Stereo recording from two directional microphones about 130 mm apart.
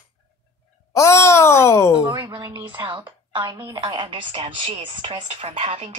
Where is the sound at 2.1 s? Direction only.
35° right (ahead or behind).